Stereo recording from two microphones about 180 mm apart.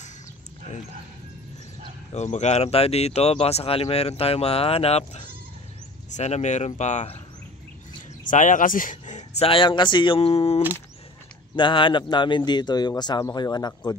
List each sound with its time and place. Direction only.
2.1 s speech: 40° left (ahead or behind)
8.3 s speech: 45° left (ahead or behind)
9.5 s speech: 30° left (ahead or behind)